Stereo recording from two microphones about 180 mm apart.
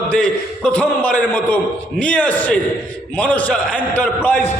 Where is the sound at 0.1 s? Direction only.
5° left (ahead or behind).